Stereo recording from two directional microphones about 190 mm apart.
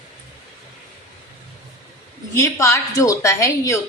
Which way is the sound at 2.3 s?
15° left (ahead or behind).